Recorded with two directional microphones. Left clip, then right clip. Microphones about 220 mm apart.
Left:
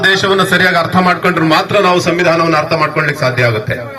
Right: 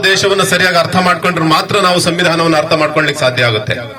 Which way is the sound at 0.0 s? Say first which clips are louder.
Even; 45° right (ahead or behind).